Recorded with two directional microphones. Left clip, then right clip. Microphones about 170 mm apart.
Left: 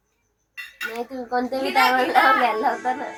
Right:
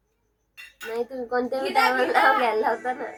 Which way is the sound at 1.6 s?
20° right (ahead or behind).